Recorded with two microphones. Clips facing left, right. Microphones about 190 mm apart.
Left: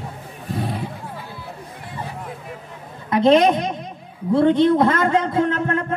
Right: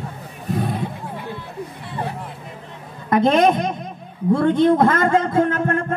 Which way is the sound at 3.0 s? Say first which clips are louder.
Left 1 dB; 50° right (ahead or behind).